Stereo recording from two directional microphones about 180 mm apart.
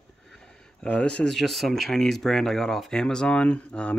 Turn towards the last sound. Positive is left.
turn(degrees=5)  # may be behind; listen again after turning